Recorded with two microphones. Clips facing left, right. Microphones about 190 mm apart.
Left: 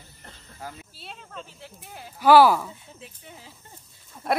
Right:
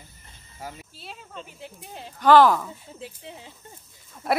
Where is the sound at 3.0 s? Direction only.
25° right (ahead or behind).